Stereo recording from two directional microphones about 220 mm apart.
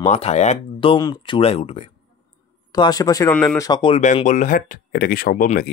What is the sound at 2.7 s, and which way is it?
Speech, 15° left (ahead or behind).